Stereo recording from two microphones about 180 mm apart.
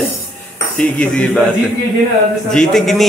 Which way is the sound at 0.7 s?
5° left (ahead or behind).